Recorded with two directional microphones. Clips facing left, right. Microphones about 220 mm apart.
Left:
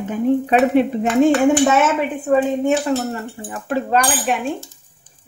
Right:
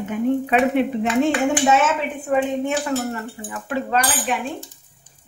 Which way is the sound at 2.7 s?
30° left (ahead or behind).